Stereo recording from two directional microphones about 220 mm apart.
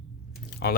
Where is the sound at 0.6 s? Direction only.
45° left (ahead or behind).